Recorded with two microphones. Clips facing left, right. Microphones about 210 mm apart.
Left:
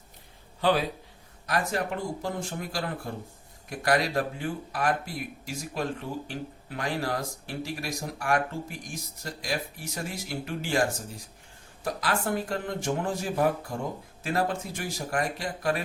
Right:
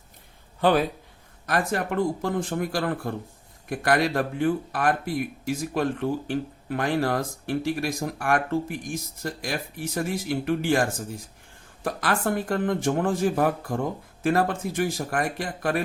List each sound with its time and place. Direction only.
0.6 s speech: 55° right (ahead or behind)